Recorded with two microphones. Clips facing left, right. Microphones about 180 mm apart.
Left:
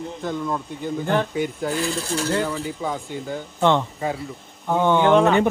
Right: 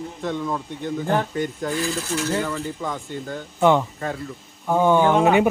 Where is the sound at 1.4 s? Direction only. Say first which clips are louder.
Left 1 dB; 10° left (ahead or behind).